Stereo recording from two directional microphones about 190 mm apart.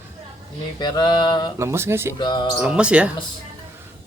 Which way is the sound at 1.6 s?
15° right (ahead or behind).